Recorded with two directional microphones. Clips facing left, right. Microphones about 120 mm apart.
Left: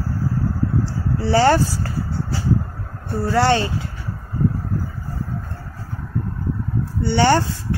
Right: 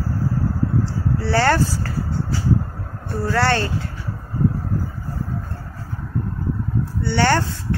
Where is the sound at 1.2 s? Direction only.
15° left (ahead or behind).